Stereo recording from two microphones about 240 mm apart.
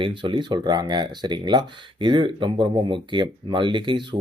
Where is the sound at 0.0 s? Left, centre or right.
Right.